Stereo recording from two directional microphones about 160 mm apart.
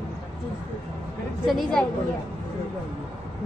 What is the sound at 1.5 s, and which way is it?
Speech, 5° left (ahead or behind).